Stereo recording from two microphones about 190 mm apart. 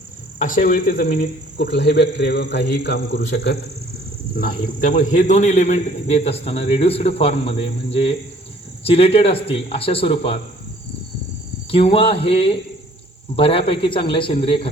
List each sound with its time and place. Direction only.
0.3 s a man's voice: 45° left (ahead or behind); by 3.6 s 60° left (ahead or behind)
4.4 s a man's voice: 45° left (ahead or behind)
11.7 s a man's voice: 30° left (ahead or behind)